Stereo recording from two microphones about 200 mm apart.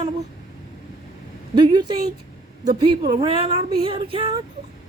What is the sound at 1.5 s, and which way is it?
Speech, 20° right (ahead or behind).